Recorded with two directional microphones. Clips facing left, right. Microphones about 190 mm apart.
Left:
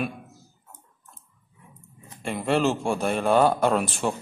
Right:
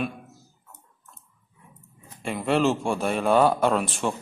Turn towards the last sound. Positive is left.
turn(degrees=0)  # may be behind; listen again after turning